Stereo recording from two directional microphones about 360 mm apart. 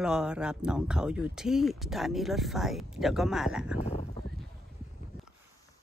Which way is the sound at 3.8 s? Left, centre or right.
Centre.